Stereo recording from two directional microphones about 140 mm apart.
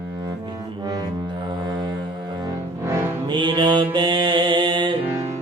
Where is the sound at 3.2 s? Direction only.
35° right (ahead or behind).